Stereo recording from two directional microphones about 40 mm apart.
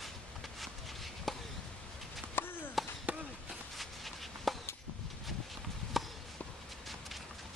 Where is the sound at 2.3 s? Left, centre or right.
Left.